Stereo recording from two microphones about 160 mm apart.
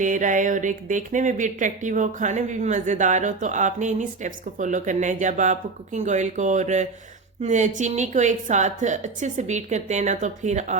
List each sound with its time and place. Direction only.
0.0 s speech: 55° right (ahead or behind)